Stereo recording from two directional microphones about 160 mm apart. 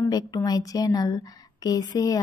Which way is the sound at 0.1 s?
25° left (ahead or behind).